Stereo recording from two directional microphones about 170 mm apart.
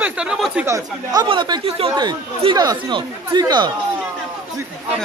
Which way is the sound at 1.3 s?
30° right (ahead or behind).